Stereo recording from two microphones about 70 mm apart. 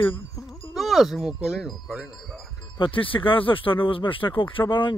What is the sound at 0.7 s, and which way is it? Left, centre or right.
Speech, centre.